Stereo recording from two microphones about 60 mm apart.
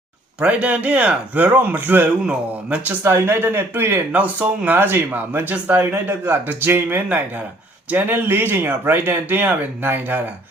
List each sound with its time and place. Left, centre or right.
0.3 s speech: right
2.2 s speech: right
3.0 s speech: right
4.1 s speech: right